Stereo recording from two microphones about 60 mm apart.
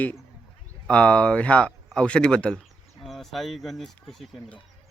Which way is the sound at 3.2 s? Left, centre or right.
Centre.